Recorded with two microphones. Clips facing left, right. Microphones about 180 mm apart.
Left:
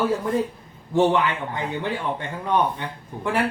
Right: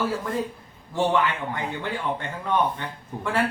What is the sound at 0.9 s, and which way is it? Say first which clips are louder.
Speech: left 3 dB; 20° left (ahead or behind).